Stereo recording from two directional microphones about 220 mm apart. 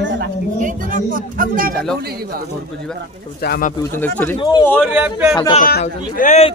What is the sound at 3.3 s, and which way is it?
Speech, 45° left (ahead or behind).